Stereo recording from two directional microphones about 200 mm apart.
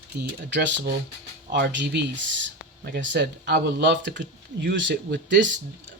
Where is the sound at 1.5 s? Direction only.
60° right (ahead or behind).